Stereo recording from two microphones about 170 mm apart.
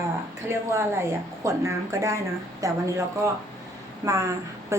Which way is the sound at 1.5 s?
20° right (ahead or behind).